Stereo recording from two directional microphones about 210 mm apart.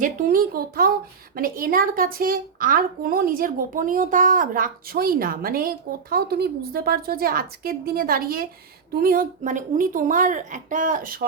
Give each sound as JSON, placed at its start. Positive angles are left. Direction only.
{"t": 0.0, "sound": "a woman's voice", "side_deg": -40}